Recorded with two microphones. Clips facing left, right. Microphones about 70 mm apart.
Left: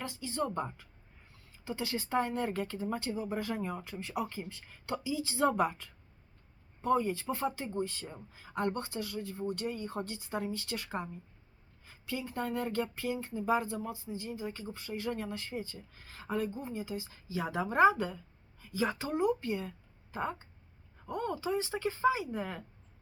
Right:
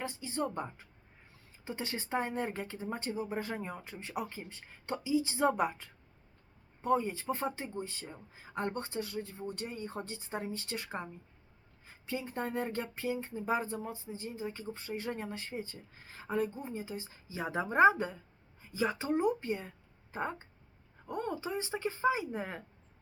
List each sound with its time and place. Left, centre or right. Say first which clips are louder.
0.0 s speech: even; right
12.0 s a woman's voice: left 1 dB; right